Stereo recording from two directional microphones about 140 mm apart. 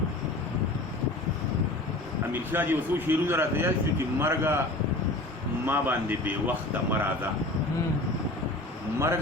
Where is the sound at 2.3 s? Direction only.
15° right (ahead or behind).